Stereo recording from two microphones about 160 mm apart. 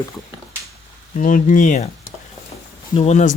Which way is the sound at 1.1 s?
55° left (ahead or behind).